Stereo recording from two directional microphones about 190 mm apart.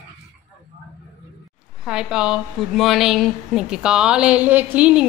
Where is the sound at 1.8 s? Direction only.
5° right (ahead or behind).